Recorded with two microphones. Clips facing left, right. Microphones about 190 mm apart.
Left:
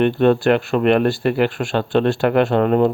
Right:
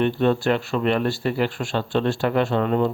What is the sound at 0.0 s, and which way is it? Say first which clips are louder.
Speech: left 5 dB; 65° left (ahead or behind).